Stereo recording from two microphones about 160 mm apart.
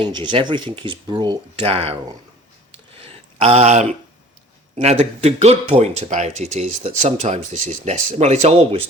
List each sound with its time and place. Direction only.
0.0 s speech: 30° right (ahead or behind)
2.7 s a sound: 35° right (ahead or behind)
4.7 s speech: 45° right (ahead or behind)